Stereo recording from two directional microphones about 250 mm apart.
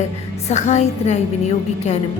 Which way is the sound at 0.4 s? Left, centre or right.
Left.